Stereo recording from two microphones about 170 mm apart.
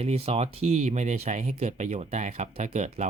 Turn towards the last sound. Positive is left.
turn(degrees=-40)  # may be behind; listen again after turning